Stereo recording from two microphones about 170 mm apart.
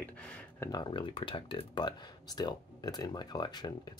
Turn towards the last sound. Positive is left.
turn(degrees=25)  # may be behind; listen again after turning